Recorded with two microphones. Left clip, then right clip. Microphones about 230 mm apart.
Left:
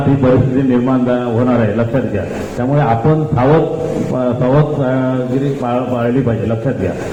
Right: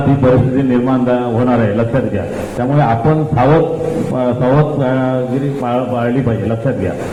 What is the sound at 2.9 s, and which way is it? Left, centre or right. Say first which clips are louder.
Speech: even; right.